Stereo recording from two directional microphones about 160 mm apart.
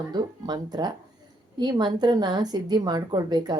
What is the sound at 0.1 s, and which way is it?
Speech, 25° right (ahead or behind).